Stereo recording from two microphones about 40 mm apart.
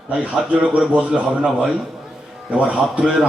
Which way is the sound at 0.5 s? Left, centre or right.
Right.